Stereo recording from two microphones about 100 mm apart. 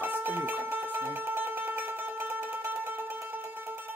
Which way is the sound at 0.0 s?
20° right (ahead or behind).